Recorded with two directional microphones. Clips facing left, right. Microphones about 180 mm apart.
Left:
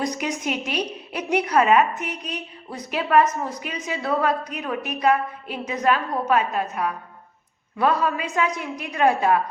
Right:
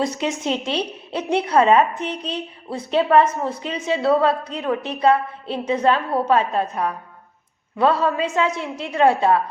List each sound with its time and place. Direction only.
0.0 s a woman's voice: 25° right (ahead or behind)